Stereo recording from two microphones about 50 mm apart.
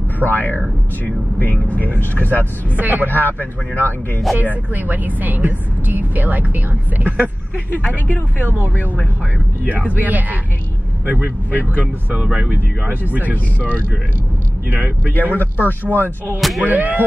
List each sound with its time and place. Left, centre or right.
0.2 s speech: left
2.7 s a woman's voice: right
3.1 s speech: left
4.7 s a woman's voice: right
8.4 s a woman's voice: right
9.7 s a woman's voice: right
11.8 s speech: right
13.1 s a woman's voice: right
15.3 s speech: left
16.3 s speech: centre
16.6 s a woman's voice: right